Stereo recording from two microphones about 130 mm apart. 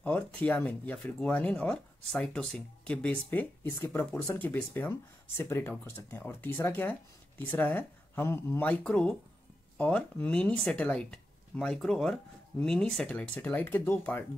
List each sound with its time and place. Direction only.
0.0 s speech: 10° left (ahead or behind)